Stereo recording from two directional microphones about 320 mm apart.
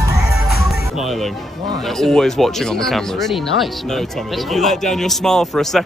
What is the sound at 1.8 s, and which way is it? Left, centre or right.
Speech, centre.